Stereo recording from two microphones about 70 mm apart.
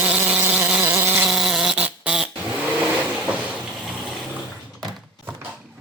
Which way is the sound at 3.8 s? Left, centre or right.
Centre.